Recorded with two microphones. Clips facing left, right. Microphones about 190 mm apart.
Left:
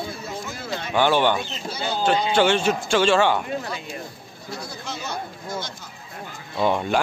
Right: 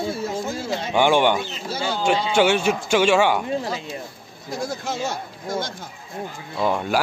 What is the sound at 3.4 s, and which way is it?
Speech, 30° right (ahead or behind).